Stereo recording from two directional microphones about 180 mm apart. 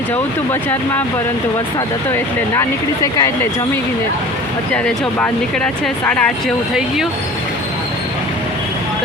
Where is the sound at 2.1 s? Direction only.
15° left (ahead or behind).